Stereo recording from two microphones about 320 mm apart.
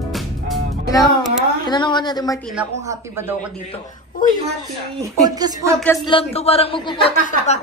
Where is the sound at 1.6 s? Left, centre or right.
Centre.